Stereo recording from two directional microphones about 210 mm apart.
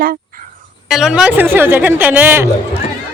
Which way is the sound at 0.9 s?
Centre (ahead or behind).